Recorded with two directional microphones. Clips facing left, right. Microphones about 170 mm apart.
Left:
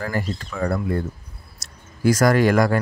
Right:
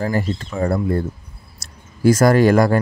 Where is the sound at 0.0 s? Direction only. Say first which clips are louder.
Right 5 dB; 25° right (ahead or behind).